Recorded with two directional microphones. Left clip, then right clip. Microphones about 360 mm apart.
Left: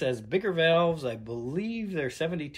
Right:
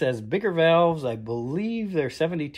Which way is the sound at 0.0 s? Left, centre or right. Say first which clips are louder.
Right 4 dB; centre.